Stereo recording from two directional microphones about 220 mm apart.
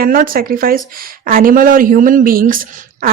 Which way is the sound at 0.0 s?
40° right (ahead or behind).